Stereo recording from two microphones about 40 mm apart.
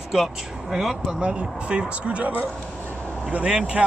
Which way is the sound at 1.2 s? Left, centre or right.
Right.